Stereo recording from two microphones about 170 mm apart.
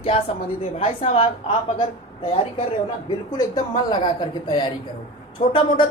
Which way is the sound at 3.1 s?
25° left (ahead or behind).